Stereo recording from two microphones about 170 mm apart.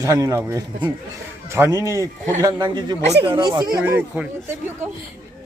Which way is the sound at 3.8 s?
10° right (ahead or behind).